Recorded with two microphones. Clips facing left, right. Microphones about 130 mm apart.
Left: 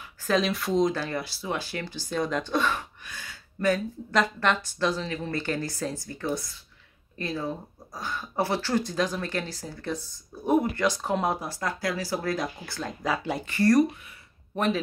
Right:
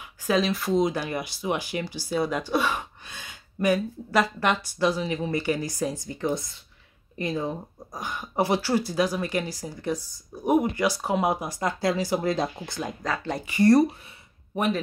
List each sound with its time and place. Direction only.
0.2 s speech: centre (ahead or behind)
2.8 s speech: 20° right (ahead or behind)
13.0 s speech: 10° left (ahead or behind)
13.5 s speech: 20° right (ahead or behind)